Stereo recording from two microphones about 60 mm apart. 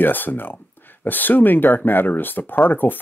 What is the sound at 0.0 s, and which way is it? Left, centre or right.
Speech, left.